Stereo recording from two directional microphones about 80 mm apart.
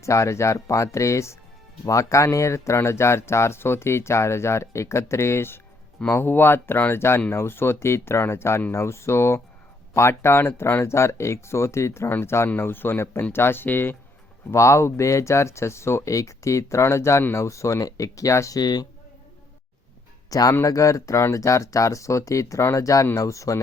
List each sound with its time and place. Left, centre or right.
0.0 s speech: left
14.5 s speech: left
18.6 s speech: left
20.3 s speech: left